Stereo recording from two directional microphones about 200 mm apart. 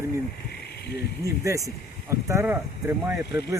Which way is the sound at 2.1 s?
15° right (ahead or behind).